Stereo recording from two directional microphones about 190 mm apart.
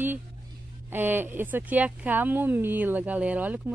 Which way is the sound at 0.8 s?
10° right (ahead or behind).